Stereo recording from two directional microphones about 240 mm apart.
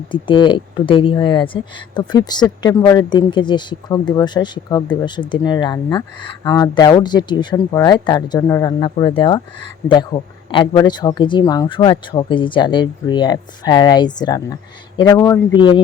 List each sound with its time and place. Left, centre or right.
0.1 s speech: centre